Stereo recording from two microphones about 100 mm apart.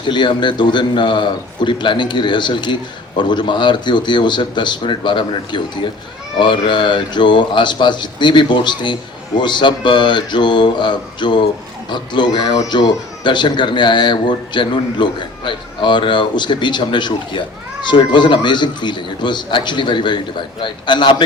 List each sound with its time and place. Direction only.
0.0 s speech: 50° left (ahead or behind)